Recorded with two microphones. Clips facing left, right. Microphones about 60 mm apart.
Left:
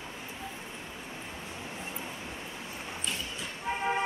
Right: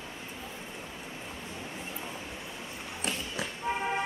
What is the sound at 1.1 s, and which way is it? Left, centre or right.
Vehicle, centre.